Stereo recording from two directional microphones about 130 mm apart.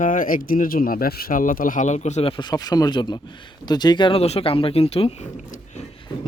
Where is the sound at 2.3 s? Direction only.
35° left (ahead or behind); by 5.3 s 50° left (ahead or behind).